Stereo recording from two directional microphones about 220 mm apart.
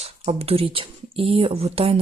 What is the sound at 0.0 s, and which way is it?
Speech, 25° right (ahead or behind).